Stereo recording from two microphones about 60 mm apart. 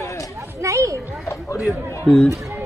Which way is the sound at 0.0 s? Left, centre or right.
Left.